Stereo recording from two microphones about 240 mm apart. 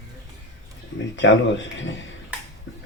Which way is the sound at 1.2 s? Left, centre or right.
Left.